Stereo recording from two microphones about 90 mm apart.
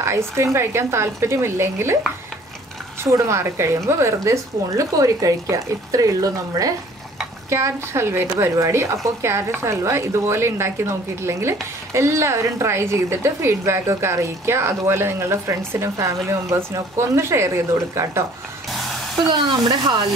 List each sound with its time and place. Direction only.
0.0 s speech: 30° right (ahead or behind)
3.0 s a woman's voice: 35° right (ahead or behind)
18.7 s spray: centre (ahead or behind)
19.2 s speech: 55° right (ahead or behind)